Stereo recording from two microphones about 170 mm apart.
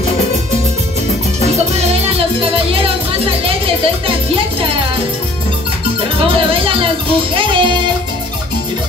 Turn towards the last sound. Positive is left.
turn(degrees=-30)  # may be behind; listen again after turning